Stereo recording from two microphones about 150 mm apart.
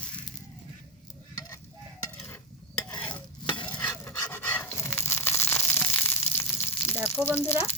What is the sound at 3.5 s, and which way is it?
Stir, 30° left (ahead or behind).